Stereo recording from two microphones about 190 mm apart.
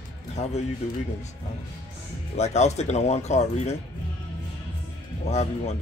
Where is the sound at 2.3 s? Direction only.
35° left (ahead or behind).